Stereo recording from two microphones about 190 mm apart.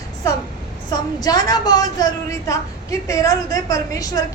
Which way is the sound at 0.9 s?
20° left (ahead or behind).